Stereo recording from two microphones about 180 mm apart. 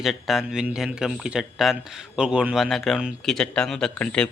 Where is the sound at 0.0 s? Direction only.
Centre (ahead or behind).